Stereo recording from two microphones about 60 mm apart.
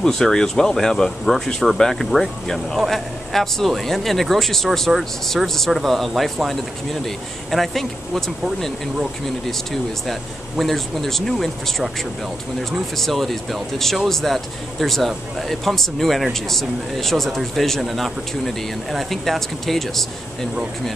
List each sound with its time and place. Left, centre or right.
0.0 s speech: centre